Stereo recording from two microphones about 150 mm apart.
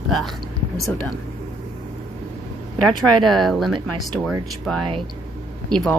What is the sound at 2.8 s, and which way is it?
Speech, centre (ahead or behind).